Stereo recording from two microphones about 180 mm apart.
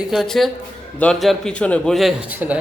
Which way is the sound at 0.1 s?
Centre (ahead or behind).